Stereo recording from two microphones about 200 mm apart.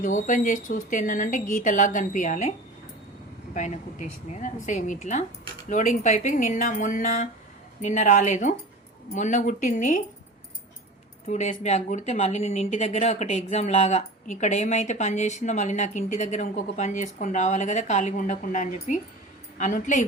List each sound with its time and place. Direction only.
0.0 s speech: 40° left (ahead or behind)
3.5 s speech: 35° left (ahead or behind)
11.3 s speech: 35° left (ahead or behind)